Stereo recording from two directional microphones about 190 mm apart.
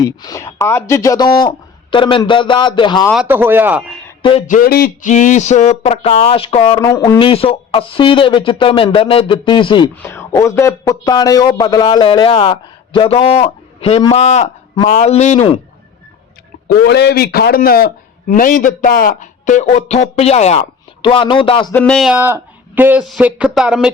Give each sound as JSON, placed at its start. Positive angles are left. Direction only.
{"t": 0.0, "sound": "a man's voice", "side_deg": 20}
{"t": 3.1, "sound": "speech", "side_deg": -5}
{"t": 4.2, "sound": "speech", "side_deg": 30}
{"t": 4.4, "sound": "a man's voice", "side_deg": 45}
{"t": 6.7, "sound": "a man's voice", "side_deg": 20}
{"t": 7.2, "sound": "a man's voice", "side_deg": 30}
{"t": 9.9, "sound": "a man's voice", "side_deg": 10}
{"t": 16.7, "sound": "a man's voice", "side_deg": 60}
{"t": 21.7, "sound": "speech", "side_deg": 5}